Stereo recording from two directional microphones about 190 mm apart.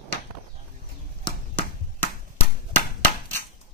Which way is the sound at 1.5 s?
10° left (ahead or behind).